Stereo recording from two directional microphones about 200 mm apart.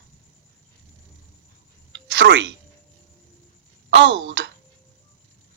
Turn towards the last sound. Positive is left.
turn(degrees=-65)  # may be behind; listen again after turning